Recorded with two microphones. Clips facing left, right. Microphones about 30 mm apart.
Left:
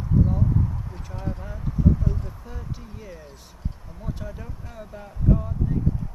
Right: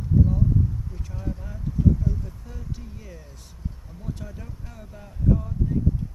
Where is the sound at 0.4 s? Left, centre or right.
Left.